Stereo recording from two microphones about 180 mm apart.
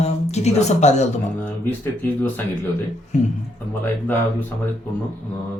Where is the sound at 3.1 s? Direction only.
40° left (ahead or behind).